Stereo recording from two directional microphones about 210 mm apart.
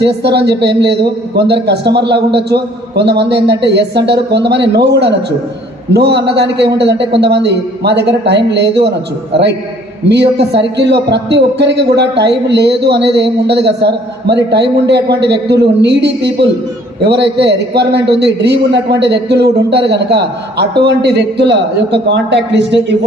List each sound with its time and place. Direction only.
0.0 s a man's voice: 55° right (ahead or behind)